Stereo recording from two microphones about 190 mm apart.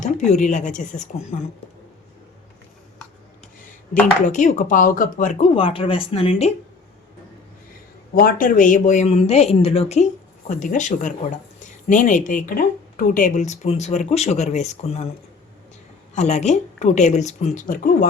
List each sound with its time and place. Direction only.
0.0 s speech: 40° left (ahead or behind)
4.3 s speech: 40° left (ahead or behind)
5.5 s speech: 30° left (ahead or behind)
8.1 s speech: 50° left (ahead or behind)
16.1 s speech: 35° left (ahead or behind)